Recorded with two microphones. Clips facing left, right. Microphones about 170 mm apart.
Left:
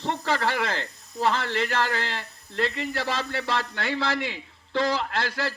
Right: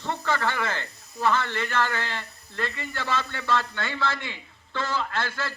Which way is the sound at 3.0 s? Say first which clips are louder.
Right 2 dB; 35° left (ahead or behind).